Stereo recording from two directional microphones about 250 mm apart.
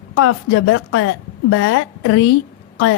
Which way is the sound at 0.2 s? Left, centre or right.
Left.